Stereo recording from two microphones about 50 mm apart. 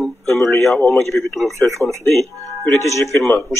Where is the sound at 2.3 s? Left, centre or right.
Left.